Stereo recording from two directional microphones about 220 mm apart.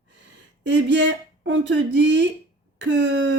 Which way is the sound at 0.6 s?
55° right (ahead or behind).